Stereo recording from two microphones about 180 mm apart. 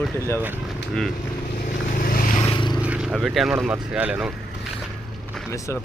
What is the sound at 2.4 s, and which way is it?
Vehicle, 30° left (ahead or behind).